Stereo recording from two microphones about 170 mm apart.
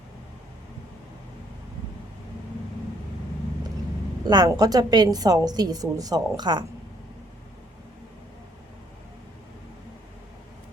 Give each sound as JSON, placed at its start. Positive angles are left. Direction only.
{"t": 4.3, "sound": "a woman's voice", "side_deg": -25}